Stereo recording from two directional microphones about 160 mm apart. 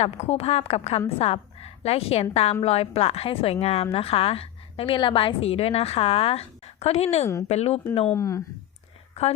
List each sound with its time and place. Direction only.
0.0 s a woman's voice: 40° left (ahead or behind)
8.1 s speech: 20° left (ahead or behind)